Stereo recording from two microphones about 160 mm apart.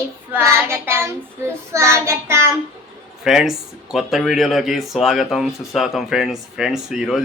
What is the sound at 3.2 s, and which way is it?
Speech, 5° right (ahead or behind).